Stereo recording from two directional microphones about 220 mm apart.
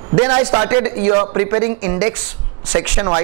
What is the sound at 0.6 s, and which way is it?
A man's voice, 15° right (ahead or behind).